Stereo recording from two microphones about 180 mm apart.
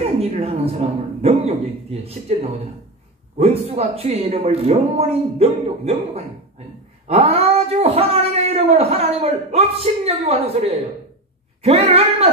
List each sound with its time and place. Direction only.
0.2 s speech: 35° right (ahead or behind)
3.3 s speech: 35° right (ahead or behind)